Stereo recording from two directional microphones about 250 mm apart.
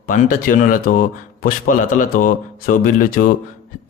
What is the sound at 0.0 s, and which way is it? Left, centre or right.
A man's voice, left.